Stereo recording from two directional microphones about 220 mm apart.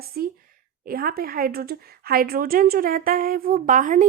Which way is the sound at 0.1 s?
40° right (ahead or behind).